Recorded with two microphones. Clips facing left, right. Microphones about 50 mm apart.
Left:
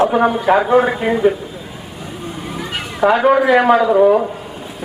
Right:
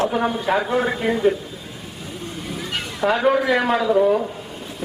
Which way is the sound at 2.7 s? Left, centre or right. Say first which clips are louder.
Left 6 dB; centre.